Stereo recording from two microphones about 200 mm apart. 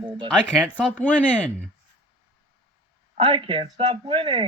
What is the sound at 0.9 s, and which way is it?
Speech, 5° left (ahead or behind).